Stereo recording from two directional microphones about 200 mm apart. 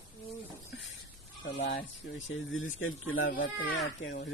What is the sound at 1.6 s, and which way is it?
Speech, 55° left (ahead or behind).